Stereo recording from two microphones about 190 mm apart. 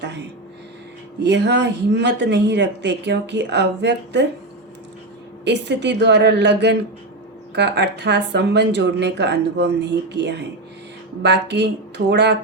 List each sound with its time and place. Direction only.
0.0 s a sound: 65° right (ahead or behind)
1.2 s speech: 65° right (ahead or behind)
5.5 s speech: 65° right (ahead or behind)